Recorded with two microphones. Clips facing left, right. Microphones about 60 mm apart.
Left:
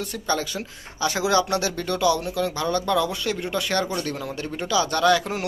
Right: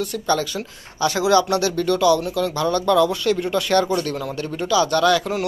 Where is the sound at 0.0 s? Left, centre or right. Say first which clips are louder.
Right 5 dB; left.